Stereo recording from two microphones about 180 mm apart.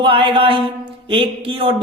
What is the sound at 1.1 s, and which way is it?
Speech, 30° right (ahead or behind).